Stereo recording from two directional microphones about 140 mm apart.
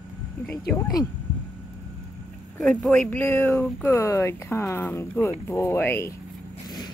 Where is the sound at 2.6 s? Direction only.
5° left (ahead or behind).